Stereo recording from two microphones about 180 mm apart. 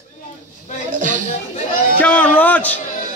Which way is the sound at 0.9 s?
45° right (ahead or behind).